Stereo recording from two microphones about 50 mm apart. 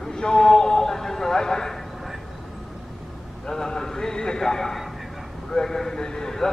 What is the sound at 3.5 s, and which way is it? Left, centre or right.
A man's voice, centre.